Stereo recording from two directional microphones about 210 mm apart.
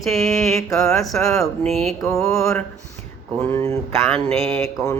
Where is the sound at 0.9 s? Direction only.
Centre (ahead or behind).